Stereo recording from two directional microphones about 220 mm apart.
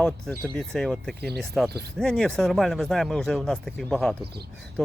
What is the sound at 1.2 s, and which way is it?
Speech, 45° right (ahead or behind).